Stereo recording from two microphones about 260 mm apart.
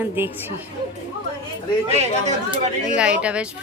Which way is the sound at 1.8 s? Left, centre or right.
Right.